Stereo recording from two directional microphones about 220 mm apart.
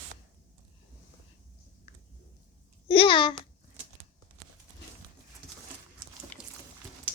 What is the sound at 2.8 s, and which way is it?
Babbling, 25° left (ahead or behind).